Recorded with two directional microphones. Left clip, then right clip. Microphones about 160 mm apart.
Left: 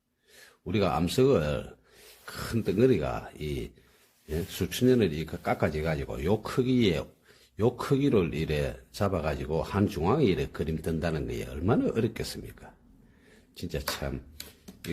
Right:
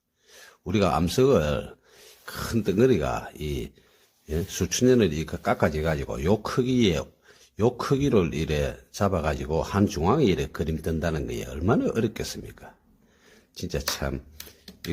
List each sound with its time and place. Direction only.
0.3 s speech: 30° right (ahead or behind)
13.6 s speech: 40° right (ahead or behind)